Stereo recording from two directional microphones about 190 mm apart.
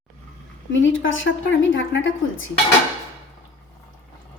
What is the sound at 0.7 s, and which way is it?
A woman's voice, 85° left.